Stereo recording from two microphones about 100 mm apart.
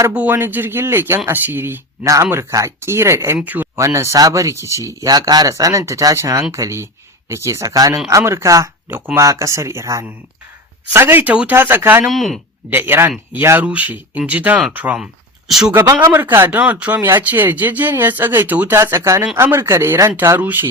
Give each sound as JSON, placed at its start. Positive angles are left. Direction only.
{"t": 0.1, "sound": "speech", "side_deg": -20}
{"t": 3.8, "sound": "speech", "side_deg": -30}
{"t": 8.9, "sound": "speech", "side_deg": -20}
{"t": 12.0, "sound": "speech", "side_deg": 0}
{"t": 12.7, "sound": "speech", "side_deg": -20}
{"t": 15.4, "sound": "speech", "side_deg": -5}
{"t": 16.0, "sound": "speech", "side_deg": -20}
{"t": 18.8, "sound": "speech", "side_deg": -30}